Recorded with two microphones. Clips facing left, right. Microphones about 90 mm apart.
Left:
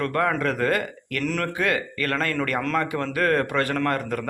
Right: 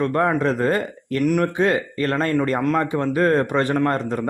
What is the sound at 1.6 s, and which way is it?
A man's voice, 25° right (ahead or behind).